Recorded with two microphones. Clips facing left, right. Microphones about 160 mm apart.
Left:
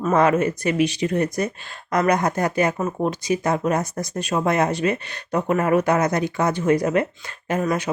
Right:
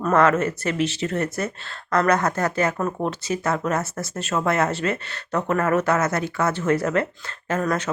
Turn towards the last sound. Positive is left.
turn(degrees=10)  # may be behind; listen again after turning